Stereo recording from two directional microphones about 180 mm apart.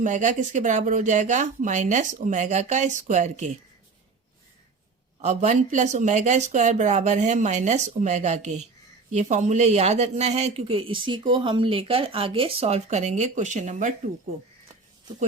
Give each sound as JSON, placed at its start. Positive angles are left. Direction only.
{"t": 0.0, "sound": "speech", "side_deg": -45}
{"t": 5.2, "sound": "speech", "side_deg": -40}